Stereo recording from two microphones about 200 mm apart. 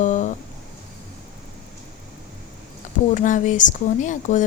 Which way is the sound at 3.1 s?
40° left (ahead or behind).